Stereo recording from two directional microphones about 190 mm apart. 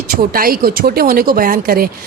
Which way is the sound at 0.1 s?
50° right (ahead or behind).